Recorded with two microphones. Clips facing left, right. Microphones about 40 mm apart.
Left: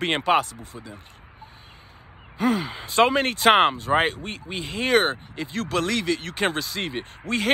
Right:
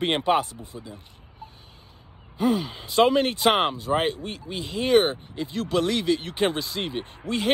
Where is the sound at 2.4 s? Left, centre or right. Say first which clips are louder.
Even; left.